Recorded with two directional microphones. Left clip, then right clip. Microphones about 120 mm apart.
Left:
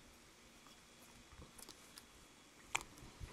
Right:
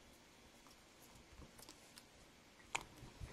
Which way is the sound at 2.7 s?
15° left (ahead or behind).